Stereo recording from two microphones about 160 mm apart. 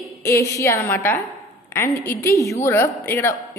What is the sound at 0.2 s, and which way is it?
A woman's voice, 20° left (ahead or behind).